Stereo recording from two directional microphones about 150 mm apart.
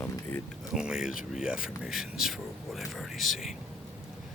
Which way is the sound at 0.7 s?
5° right (ahead or behind).